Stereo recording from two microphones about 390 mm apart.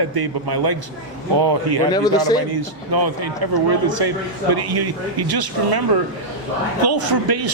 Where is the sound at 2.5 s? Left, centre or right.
Right.